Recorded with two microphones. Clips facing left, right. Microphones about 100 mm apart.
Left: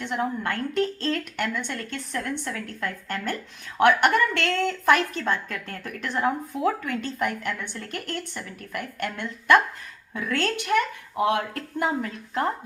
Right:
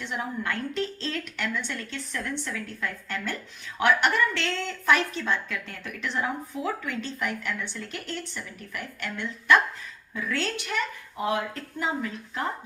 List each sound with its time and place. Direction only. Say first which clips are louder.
0.0 s a woman's voice: left 4 dB; 50° left (ahead or behind)